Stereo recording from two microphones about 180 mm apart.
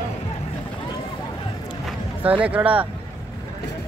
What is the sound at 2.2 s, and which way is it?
Speech, 10° right (ahead or behind).